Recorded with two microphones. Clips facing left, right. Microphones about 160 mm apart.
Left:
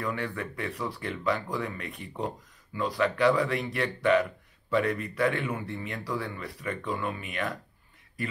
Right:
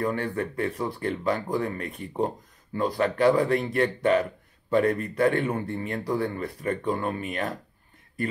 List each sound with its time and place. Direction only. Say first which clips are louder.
0.0 s speech: right 5 dB; 40° right (ahead or behind)